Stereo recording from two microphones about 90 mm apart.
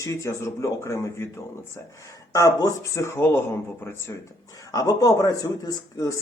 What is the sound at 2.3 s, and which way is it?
Speech, 35° left (ahead or behind).